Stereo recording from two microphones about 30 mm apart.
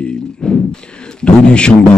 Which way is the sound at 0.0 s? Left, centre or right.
Left.